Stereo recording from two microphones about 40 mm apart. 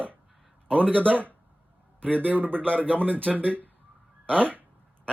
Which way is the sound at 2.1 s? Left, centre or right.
Right.